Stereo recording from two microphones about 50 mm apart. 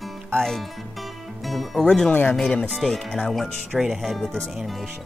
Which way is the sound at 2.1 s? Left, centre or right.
Left.